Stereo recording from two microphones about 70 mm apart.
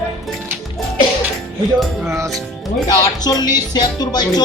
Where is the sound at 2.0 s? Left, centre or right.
Right.